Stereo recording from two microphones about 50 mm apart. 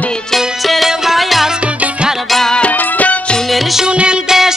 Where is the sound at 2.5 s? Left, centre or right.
Left.